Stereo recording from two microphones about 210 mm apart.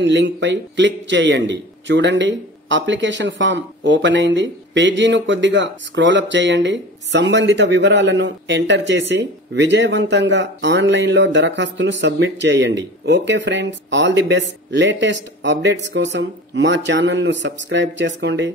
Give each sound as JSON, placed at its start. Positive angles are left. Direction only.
{"t": 0.0, "sound": "speech", "side_deg": -60}